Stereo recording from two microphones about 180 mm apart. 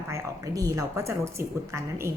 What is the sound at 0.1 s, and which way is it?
A woman's voice, 20° right (ahead or behind).